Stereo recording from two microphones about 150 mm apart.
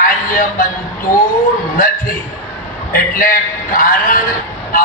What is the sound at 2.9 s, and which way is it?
Speech, 65° left (ahead or behind).